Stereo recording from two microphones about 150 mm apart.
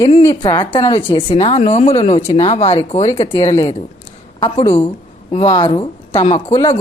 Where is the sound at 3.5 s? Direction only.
20° left (ahead or behind).